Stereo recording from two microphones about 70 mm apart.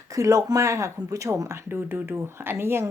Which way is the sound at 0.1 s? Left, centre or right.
Right.